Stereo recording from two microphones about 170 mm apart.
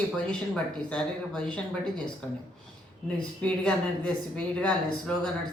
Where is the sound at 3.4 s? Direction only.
5° left (ahead or behind).